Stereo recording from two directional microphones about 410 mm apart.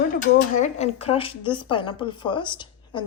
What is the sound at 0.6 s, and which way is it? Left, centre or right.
Speech, centre.